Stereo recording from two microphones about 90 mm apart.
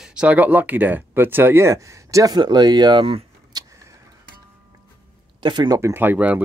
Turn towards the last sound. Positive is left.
turn(degrees=-15)  # may be behind; listen again after turning